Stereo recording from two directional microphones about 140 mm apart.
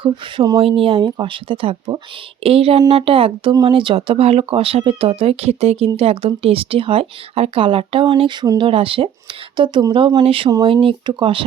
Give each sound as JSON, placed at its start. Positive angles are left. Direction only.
{"t": 0.0, "sound": "speech", "side_deg": -30}